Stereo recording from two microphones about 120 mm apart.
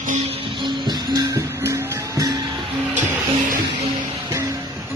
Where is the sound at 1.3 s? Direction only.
25° right (ahead or behind).